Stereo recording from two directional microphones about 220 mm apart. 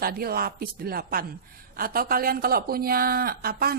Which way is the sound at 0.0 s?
40° right (ahead or behind).